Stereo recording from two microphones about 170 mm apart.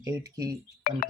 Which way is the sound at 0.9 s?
60° left (ahead or behind).